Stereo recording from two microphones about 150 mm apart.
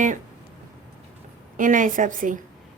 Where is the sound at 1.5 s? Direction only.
60° right (ahead or behind).